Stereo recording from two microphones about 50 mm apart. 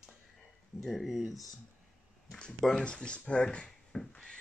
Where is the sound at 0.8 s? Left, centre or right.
Centre.